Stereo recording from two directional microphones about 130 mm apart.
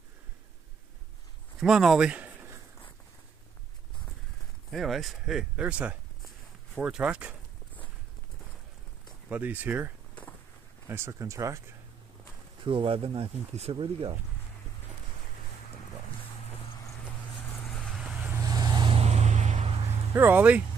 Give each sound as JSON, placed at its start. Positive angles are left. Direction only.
{"t": 1.6, "sound": "speech", "side_deg": -5}
{"t": 4.6, "sound": "speech", "side_deg": 0}
{"t": 9.3, "sound": "speech", "side_deg": -15}
{"t": 12.6, "sound": "speech", "side_deg": -45}
{"t": 17.6, "sound": "vehicle", "side_deg": 5}
{"t": 18.4, "sound": "vehicle", "side_deg": -30}
{"t": 18.9, "sound": "a sound", "side_deg": -55}
{"t": 20.1, "sound": "speech", "side_deg": -15}